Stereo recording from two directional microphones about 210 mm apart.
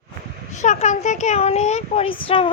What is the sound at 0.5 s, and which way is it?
Speech, 35° left (ahead or behind).